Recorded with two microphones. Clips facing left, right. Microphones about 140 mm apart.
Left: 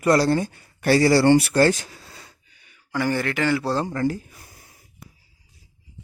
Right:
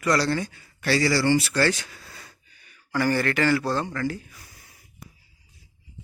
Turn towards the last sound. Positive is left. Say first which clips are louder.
# left 5 dB
turn(degrees=40)  # may be behind; listen again after turning